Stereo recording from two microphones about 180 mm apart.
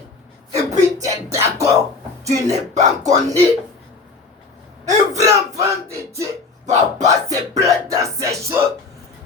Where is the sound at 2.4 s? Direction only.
40° right (ahead or behind).